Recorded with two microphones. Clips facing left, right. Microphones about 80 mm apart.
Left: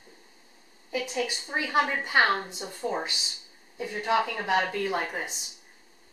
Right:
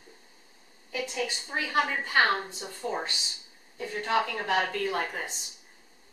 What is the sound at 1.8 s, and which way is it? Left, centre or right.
A woman's voice, centre.